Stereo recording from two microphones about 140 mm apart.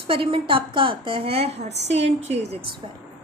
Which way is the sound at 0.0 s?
40° right (ahead or behind).